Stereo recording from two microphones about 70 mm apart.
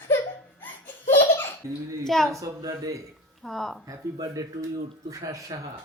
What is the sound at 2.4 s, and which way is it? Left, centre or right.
Speech, right.